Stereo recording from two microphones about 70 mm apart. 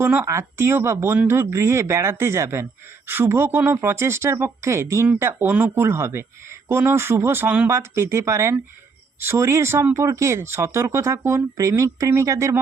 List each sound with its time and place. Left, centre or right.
0.0 s speech: right
0.3 s speech: right
1.1 s speech: right
5.8 s speech: right